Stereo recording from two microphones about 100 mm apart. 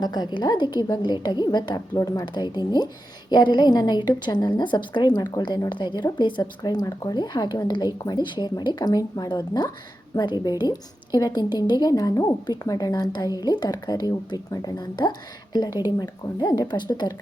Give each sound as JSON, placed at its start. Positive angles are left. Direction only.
{"t": 0.0, "sound": "a woman's voice", "side_deg": 45}